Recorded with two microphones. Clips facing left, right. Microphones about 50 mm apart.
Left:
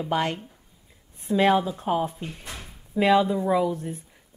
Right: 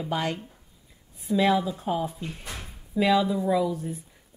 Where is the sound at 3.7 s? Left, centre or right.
Left.